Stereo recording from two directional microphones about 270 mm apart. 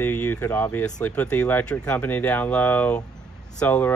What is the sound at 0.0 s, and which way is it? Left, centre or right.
Speech, centre.